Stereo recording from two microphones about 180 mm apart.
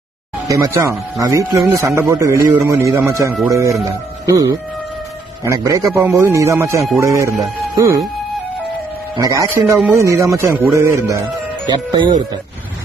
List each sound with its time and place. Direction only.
0.5 s speech: 15° right (ahead or behind)
5.4 s speech: 15° right (ahead or behind)
9.2 s speech: 15° right (ahead or behind)